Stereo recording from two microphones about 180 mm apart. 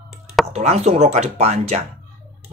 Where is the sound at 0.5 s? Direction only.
35° right (ahead or behind).